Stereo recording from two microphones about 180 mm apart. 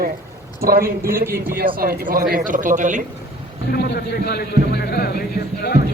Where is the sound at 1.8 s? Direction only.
55° right (ahead or behind).